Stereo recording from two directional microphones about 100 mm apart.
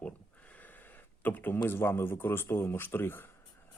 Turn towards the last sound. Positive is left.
turn(degrees=20)  # may be behind; listen again after turning